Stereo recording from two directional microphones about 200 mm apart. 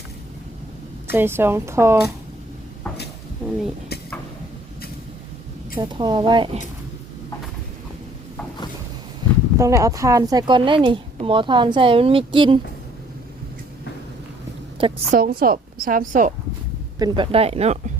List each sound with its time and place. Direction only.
1.1 s a woman's voice: 10° right (ahead or behind)
5.8 s a woman's voice: 20° right (ahead or behind)
9.2 s a sound: 20° right (ahead or behind)
9.6 s a woman's voice: 15° right (ahead or behind)
14.8 s a woman's voice: 30° right (ahead or behind)
15.2 s a woman's voice: 50° right (ahead or behind)
17.0 s speech: 25° right (ahead or behind)